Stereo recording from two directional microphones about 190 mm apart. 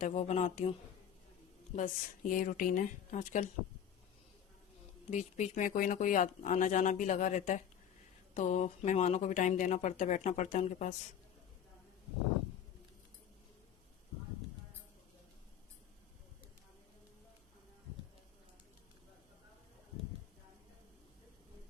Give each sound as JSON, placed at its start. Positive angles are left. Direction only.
{"t": 0.0, "sound": "speech", "side_deg": 40}
{"t": 1.7, "sound": "speech", "side_deg": 45}
{"t": 5.1, "sound": "speech", "side_deg": 40}